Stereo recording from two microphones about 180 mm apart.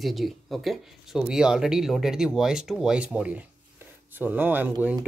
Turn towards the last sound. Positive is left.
turn(degrees=-10)  # may be behind; listen again after turning